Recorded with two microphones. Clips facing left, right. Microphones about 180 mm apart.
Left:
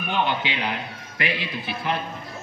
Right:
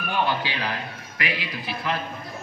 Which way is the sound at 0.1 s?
20° left (ahead or behind).